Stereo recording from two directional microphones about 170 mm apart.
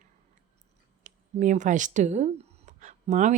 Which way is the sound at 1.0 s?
50° right (ahead or behind).